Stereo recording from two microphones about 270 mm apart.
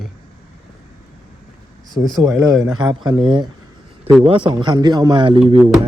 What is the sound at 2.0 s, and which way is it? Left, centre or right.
A man's voice, centre.